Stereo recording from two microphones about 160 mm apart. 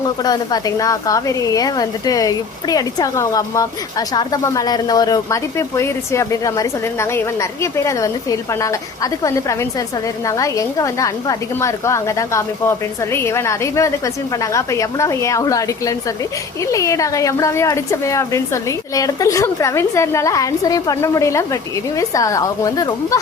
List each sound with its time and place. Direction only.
0.2 s a woman's voice: 25° left (ahead or behind)